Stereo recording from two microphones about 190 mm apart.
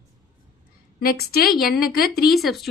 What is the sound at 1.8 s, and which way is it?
Speech, 50° left (ahead or behind).